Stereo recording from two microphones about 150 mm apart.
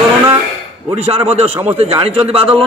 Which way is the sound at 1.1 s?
45° right (ahead or behind).